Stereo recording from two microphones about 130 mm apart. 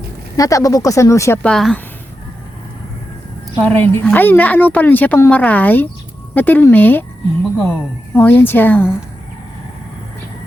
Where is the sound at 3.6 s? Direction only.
15° left (ahead or behind).